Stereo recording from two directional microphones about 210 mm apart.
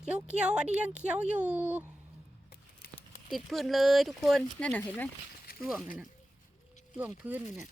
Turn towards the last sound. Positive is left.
turn(degrees=-5)  # may be behind; listen again after turning